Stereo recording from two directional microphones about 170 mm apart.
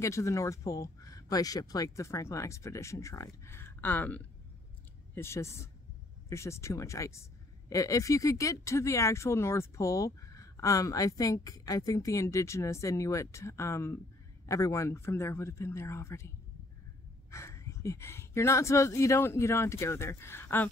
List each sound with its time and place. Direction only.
0.0 s speech: 15° left (ahead or behind)
17.3 s speech: 15° left (ahead or behind)